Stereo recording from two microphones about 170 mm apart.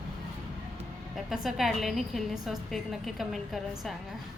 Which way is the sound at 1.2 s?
Centre (ahead or behind).